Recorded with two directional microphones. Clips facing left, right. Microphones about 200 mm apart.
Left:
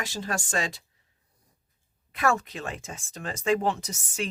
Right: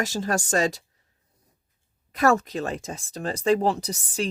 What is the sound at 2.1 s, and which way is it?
Speech, 40° right (ahead or behind).